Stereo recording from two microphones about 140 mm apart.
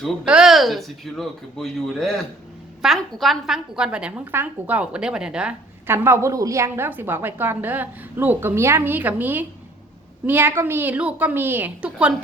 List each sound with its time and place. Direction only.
0.0 s a woman's voice: 5° right (ahead or behind)